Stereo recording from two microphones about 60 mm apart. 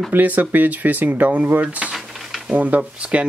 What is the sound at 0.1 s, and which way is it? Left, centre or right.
Speech, right.